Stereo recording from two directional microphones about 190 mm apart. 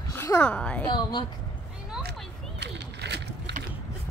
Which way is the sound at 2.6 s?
65° right (ahead or behind).